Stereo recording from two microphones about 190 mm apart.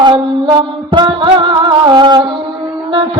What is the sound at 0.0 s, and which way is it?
Music, 25° right (ahead or behind).